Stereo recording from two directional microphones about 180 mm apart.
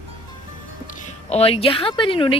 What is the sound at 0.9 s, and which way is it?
Speech, 35° left (ahead or behind).